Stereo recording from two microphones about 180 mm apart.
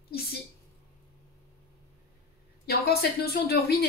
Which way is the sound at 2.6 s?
60° left (ahead or behind).